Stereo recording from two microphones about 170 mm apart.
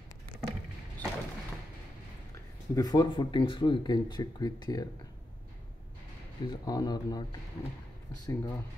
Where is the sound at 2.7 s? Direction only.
25° left (ahead or behind).